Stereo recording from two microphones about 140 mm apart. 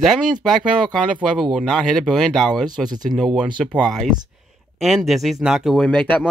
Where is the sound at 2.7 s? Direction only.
30° right (ahead or behind).